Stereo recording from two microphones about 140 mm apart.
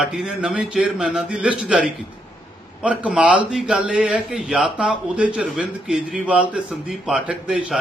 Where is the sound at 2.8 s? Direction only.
10° right (ahead or behind).